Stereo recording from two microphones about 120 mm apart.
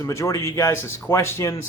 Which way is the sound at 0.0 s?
25° left (ahead or behind).